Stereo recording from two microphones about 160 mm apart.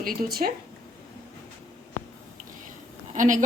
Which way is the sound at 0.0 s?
65° right (ahead or behind).